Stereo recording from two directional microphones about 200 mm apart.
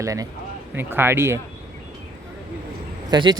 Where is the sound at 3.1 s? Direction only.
20° right (ahead or behind).